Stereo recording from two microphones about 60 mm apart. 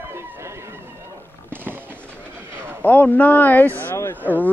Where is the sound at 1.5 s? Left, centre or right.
Right.